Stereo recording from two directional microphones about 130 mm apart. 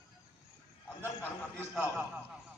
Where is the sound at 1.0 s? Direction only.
15° left (ahead or behind).